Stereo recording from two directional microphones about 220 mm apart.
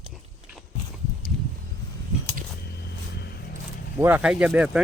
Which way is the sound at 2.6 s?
50° left (ahead or behind).